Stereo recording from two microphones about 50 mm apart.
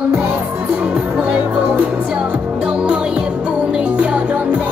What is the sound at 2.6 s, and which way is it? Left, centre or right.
Music, centre.